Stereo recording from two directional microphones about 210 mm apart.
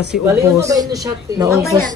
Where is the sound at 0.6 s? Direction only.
15° right (ahead or behind).